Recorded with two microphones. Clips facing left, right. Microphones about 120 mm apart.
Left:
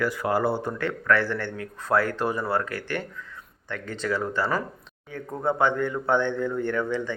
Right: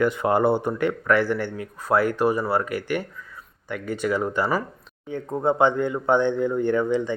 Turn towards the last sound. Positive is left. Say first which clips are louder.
# right 5 dB
turn(degrees=-15)  # may be behind; listen again after turning